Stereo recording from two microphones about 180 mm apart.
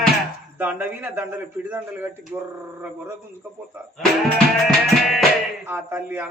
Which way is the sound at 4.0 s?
5° left (ahead or behind).